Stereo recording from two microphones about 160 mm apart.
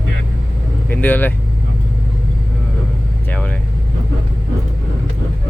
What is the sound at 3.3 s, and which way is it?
Vehicle, 10° left (ahead or behind).